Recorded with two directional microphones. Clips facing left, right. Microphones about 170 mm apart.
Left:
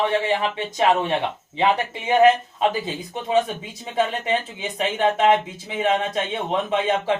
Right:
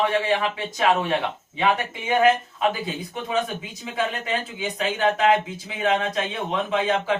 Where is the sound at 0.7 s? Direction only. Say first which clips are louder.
Left 2 dB; 25° left (ahead or behind).